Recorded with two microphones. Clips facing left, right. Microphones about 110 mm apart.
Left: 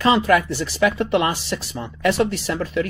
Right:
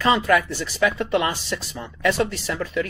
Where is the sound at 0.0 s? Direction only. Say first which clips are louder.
Left 2 dB; 25° left (ahead or behind).